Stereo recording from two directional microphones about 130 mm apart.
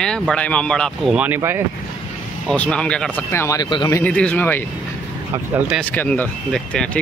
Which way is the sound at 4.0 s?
10° left (ahead or behind).